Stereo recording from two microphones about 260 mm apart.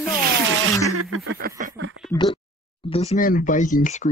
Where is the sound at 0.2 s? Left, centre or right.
Right.